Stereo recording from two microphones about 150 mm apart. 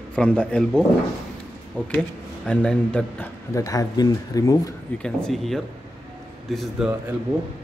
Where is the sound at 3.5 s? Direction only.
20° left (ahead or behind).